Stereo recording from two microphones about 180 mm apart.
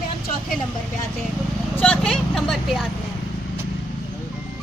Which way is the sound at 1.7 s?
5° left (ahead or behind).